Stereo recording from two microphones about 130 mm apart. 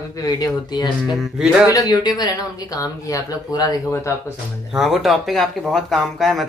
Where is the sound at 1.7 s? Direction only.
30° left (ahead or behind).